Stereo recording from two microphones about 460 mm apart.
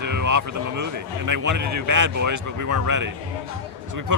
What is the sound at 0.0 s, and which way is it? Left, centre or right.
Speech, right.